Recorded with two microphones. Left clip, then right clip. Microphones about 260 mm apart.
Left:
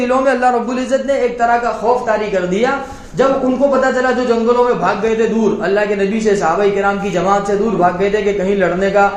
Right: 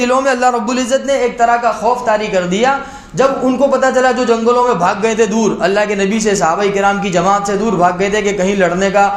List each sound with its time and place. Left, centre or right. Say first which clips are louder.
0.1 s speech: left 1 dB; right
2.0 s speech: right 2 dB; right
3.7 s speech: right 3 dB; right